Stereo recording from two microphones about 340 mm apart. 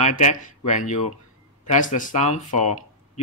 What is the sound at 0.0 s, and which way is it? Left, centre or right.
Speech, left.